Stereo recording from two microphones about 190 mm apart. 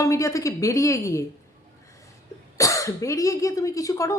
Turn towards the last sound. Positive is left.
turn(degrees=15)  # may be behind; listen again after turning